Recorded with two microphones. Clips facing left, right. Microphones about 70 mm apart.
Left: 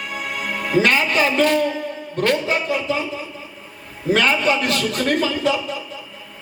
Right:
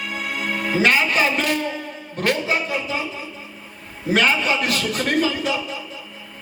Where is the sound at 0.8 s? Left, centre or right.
Centre.